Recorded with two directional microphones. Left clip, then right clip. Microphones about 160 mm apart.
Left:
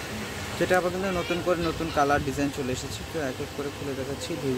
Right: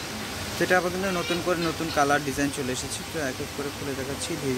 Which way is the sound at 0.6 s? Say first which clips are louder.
Right 1 dB; 5° right (ahead or behind).